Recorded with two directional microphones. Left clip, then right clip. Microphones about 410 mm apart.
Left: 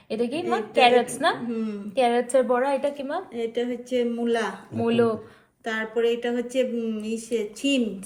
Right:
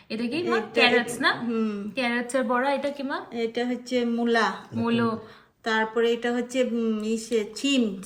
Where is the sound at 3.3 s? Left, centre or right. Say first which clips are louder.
Even; centre.